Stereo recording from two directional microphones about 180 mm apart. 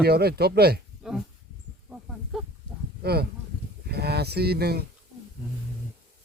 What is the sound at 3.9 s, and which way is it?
Speech, 65° right (ahead or behind).